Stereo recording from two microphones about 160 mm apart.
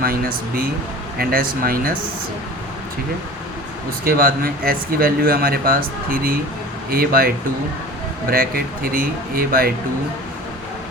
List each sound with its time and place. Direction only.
0.0 s speech: 65° right (ahead or behind)
4.0 s speech: 65° right (ahead or behind)